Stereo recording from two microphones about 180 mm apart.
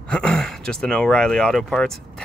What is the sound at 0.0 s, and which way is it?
Speech, 5° left (ahead or behind).